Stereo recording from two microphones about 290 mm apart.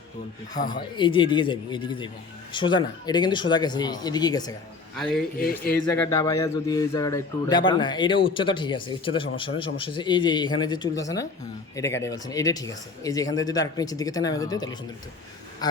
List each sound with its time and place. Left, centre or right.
0.7 s speech: centre
4.9 s a man's voice: centre
5.4 s speech: left
5.8 s speech: centre